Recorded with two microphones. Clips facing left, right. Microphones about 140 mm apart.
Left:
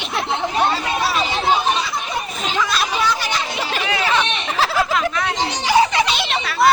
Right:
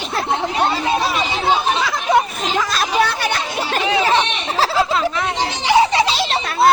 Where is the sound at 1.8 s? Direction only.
90° right.